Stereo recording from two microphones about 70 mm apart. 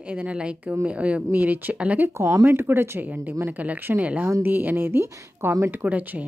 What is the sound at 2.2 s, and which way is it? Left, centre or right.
Speech, right.